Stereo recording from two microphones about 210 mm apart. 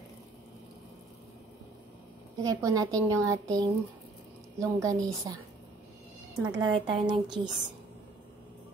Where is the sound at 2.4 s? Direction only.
15° right (ahead or behind).